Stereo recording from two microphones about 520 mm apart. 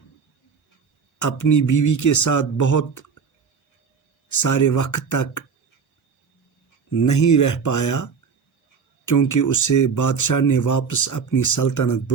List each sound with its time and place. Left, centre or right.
1.2 s speech: left
4.3 s speech: left
6.9 s speech: left